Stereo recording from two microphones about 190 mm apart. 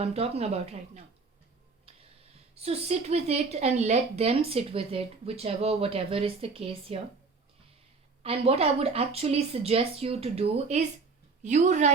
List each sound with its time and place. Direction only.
0.0 s speech: 35° right (ahead or behind)
2.6 s speech: 35° right (ahead or behind)
8.2 s speech: 30° right (ahead or behind)